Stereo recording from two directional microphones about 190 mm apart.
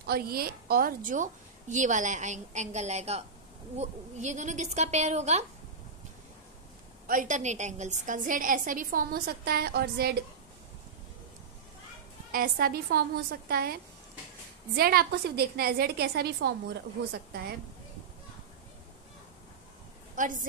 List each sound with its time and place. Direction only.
0.0 s a woman's voice: 55° right (ahead or behind); by 5.4 s 35° right (ahead or behind)
7.1 s a woman's voice: 45° right (ahead or behind)
12.3 s a woman's voice: 50° right (ahead or behind)
14.8 s a woman's voice: 55° right (ahead or behind)
20.2 s a woman's voice: 45° right (ahead or behind)